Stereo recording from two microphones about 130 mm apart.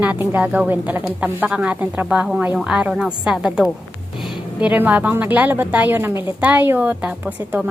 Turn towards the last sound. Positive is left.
turn(degrees=-10)  # may be behind; listen again after turning